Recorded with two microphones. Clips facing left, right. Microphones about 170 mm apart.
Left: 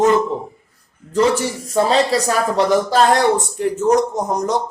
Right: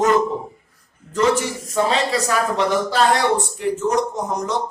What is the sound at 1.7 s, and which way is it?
Speech, 35° left (ahead or behind).